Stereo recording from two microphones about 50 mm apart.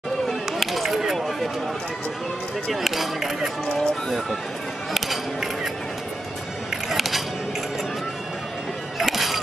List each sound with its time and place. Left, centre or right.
0.3 s chop: centre
2.7 s speech: centre
4.9 s music: centre
6.9 s music: centre
9.0 s music: centre